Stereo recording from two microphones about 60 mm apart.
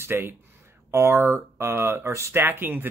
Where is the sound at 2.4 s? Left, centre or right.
Right.